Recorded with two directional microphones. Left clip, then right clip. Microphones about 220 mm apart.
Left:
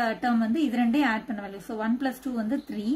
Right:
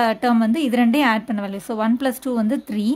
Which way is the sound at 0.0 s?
45° right (ahead or behind).